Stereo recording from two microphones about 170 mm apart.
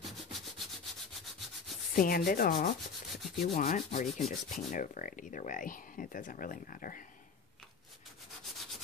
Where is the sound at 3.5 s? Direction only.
50° left (ahead or behind).